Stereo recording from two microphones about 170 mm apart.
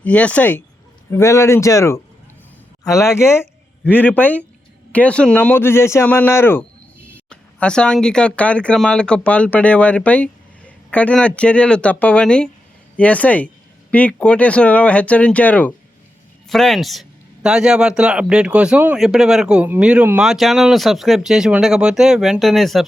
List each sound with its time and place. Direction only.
0.0 s a man's voice: 10° left (ahead or behind)